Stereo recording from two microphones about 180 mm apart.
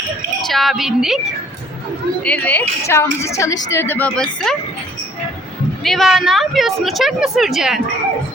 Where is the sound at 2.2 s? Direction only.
5° left (ahead or behind).